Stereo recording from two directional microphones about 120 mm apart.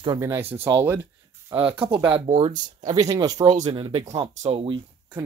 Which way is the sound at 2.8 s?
30° right (ahead or behind).